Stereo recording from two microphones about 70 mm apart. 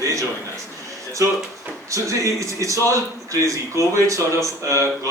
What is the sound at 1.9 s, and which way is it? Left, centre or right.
Speech, right.